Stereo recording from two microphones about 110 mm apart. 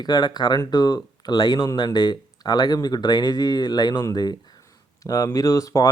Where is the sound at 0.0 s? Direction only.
40° left (ahead or behind).